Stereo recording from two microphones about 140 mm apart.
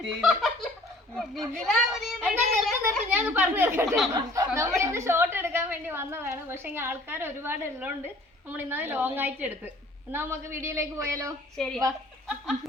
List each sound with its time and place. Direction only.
0.2 s a child's voice: centre (ahead or behind)
3.1 s a woman's voice: 15° right (ahead or behind)
11.5 s a child's voice: 5° left (ahead or behind)